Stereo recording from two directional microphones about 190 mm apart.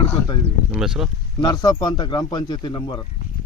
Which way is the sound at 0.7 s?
5° right (ahead or behind).